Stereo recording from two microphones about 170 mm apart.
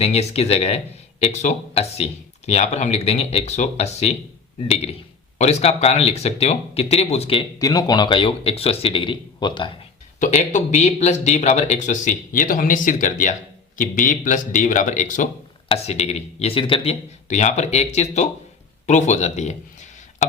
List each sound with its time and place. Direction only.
0.0 s speech: 40° left (ahead or behind)
7.6 s speech: 20° left (ahead or behind)
10.2 s speech: 45° left (ahead or behind)